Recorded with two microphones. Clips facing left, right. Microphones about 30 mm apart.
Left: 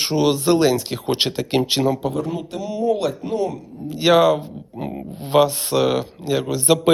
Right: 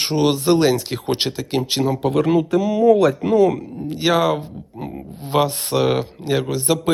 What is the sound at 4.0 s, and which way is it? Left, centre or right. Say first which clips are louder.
Speech: left 3 dB; centre.